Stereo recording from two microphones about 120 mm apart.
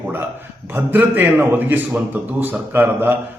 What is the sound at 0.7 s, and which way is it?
A man's voice, 15° right (ahead or behind).